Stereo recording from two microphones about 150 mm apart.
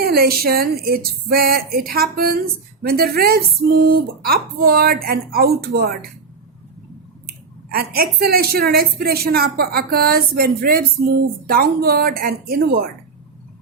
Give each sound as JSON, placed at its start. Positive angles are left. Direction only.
{"t": 0.0, "sound": "a woman's voice", "side_deg": -90}
{"t": 7.7, "sound": "a woman's voice", "side_deg": -90}